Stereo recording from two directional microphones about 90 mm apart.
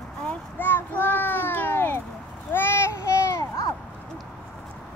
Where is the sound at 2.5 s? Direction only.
25° left (ahead or behind).